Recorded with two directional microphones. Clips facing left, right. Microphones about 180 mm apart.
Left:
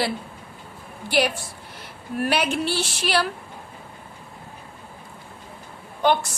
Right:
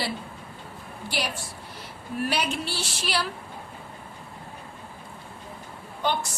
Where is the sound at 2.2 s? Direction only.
60° left (ahead or behind).